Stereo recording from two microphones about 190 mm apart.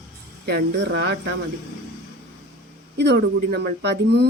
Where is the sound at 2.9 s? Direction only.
65° right (ahead or behind).